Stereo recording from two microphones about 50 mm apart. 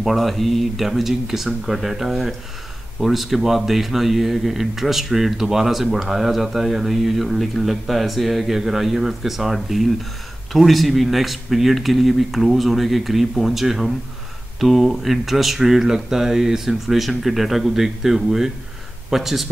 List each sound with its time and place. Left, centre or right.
0.0 s speech: centre